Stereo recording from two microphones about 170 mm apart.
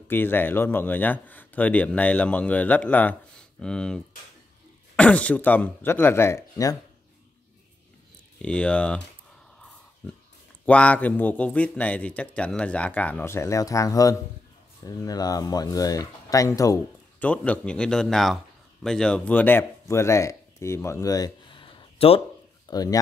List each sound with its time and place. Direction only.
0.1 s speech: 10° left (ahead or behind)
8.4 s speech: 5° left (ahead or behind)
10.6 s speech: 10° left (ahead or behind)
17.2 s speech: 10° left (ahead or behind); by 22.2 s 35° left (ahead or behind)
22.7 s speech: 20° left (ahead or behind)